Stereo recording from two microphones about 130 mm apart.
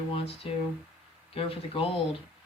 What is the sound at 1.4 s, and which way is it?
Speech, 45° left (ahead or behind).